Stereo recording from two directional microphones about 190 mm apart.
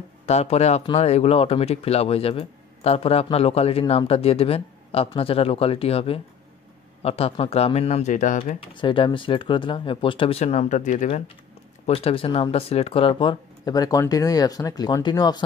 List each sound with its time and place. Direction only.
0.3 s speech: 35° left (ahead or behind)
8.5 s speech: 25° left (ahead or behind)